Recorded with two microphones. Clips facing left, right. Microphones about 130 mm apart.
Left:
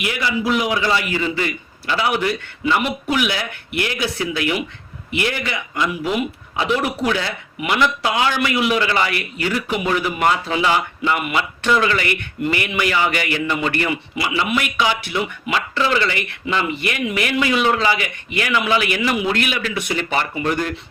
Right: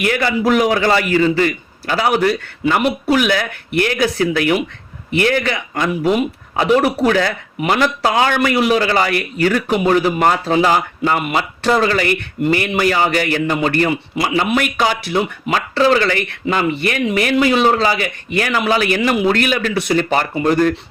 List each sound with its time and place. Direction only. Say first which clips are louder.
0.0 s a man's voice: right 5 dB; 50° right (ahead or behind)